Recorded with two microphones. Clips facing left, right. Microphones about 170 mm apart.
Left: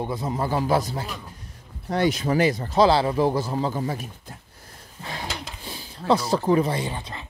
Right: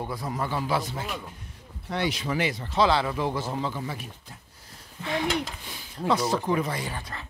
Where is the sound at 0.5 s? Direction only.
40° left (ahead or behind).